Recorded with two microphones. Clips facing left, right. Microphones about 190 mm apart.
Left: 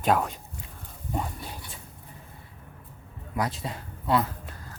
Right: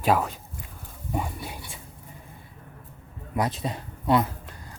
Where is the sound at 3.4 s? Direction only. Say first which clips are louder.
Right 3 dB; 20° right (ahead or behind).